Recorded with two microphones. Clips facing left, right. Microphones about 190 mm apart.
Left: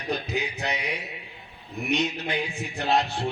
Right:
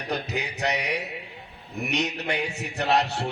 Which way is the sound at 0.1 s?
70° right (ahead or behind).